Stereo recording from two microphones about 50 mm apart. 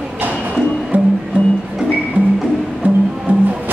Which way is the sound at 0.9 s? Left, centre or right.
Right.